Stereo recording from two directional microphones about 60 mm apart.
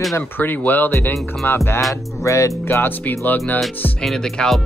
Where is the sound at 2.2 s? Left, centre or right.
Left.